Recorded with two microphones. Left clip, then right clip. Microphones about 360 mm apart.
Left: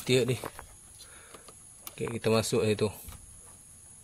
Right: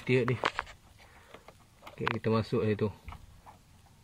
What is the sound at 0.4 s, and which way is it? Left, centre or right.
Speech, right.